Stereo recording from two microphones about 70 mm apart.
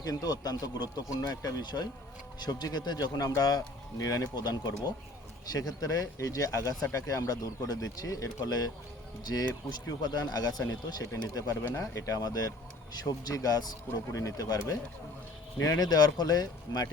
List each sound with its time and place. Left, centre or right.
0.0 s speech: left
5.5 s speech: left
14.1 s speech: left